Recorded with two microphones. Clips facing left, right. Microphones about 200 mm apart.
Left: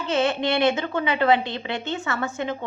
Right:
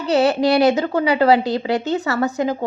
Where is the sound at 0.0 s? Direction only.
40° right (ahead or behind).